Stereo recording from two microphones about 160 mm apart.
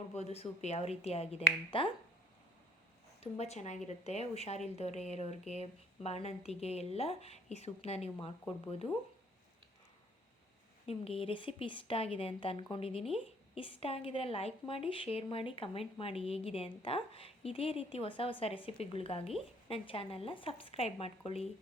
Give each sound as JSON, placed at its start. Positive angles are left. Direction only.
{"t": 0.2, "sound": "speech", "side_deg": 40}
{"t": 3.2, "sound": "a woman's voice", "side_deg": 40}
{"t": 10.8, "sound": "speech", "side_deg": 40}